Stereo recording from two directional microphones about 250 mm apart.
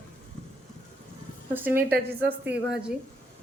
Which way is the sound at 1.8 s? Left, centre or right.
Right.